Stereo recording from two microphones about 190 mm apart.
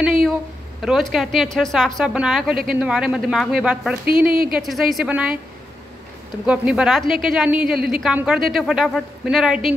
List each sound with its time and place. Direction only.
0.8 s a woman's voice: centre (ahead or behind)
4.3 s speech: 50° right (ahead or behind)
4.6 s a woman's voice: centre (ahead or behind)
6.4 s a woman's voice: 5° right (ahead or behind)